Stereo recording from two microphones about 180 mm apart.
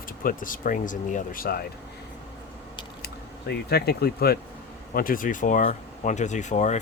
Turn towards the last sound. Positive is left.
turn(degrees=40)  # may be behind; listen again after turning